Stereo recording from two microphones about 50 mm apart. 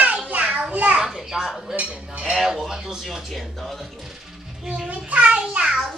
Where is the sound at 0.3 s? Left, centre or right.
Right.